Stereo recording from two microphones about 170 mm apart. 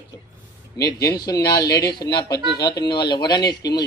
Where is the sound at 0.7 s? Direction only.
20° left (ahead or behind).